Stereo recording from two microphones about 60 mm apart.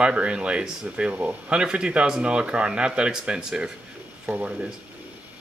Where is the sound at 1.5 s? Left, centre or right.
Centre.